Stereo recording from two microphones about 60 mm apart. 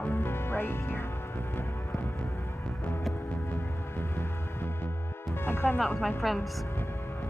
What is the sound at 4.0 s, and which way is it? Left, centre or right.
Music, left.